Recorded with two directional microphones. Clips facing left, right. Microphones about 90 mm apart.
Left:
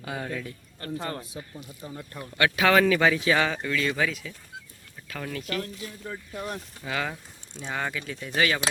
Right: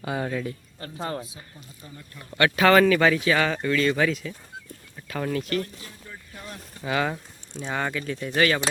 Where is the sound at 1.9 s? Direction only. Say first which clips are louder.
Left 6 dB; 65° left (ahead or behind).